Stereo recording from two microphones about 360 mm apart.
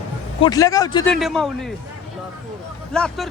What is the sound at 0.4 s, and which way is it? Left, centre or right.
A man's voice, centre.